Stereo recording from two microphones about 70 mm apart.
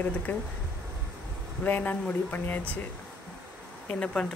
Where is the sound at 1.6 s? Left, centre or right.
Left.